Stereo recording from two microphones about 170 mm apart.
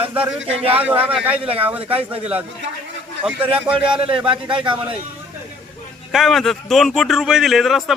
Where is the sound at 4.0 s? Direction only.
30° right (ahead or behind).